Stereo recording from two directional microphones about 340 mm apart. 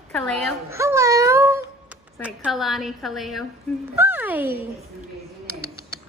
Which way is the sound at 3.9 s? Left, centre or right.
Centre.